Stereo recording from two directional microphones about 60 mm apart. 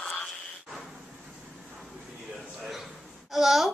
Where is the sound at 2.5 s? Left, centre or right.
Centre.